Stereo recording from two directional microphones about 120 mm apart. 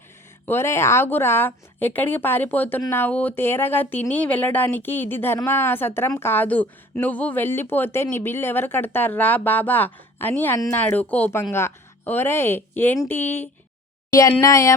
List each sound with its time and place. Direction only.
0.4 s a woman's voice: 20° left (ahead or behind)
14.2 s speech: 25° left (ahead or behind)